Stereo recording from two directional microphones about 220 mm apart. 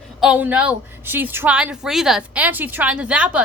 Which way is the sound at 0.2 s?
5° right (ahead or behind).